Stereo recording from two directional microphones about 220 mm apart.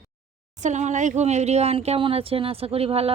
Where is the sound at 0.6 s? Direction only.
35° right (ahead or behind).